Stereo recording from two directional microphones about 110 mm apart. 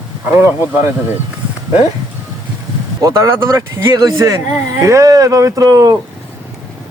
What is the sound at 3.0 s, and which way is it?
Speech, 30° right (ahead or behind).